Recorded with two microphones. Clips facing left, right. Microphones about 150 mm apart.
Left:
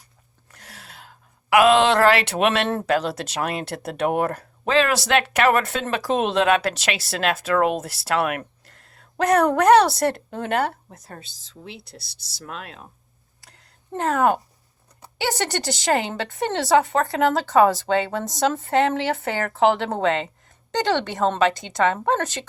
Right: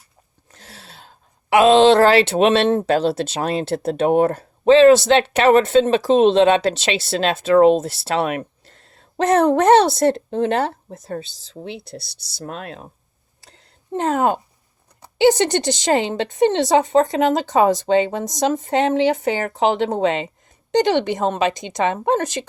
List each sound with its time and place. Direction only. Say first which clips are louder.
0.5 s speech: right 2 dB; 30° right (ahead or behind)
13.4 s a sound: right 3 dB; 25° right (ahead or behind)
15.0 s speech: right 11 dB; 20° right (ahead or behind)